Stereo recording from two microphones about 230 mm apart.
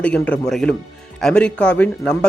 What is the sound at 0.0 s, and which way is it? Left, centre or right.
Speech, centre.